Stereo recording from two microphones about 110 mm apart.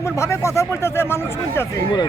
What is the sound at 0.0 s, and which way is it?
Speech, 25° left (ahead or behind).